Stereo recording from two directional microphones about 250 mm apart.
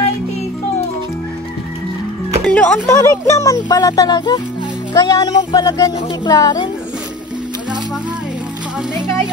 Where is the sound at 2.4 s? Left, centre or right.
Centre.